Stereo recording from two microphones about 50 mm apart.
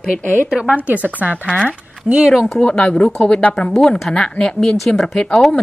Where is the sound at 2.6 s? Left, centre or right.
Left.